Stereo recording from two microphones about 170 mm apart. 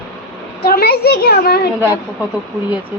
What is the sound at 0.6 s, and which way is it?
A child's voice, 65° left (ahead or behind).